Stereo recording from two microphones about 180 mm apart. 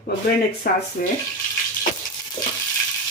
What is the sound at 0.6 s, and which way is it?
Speech, 55° left (ahead or behind).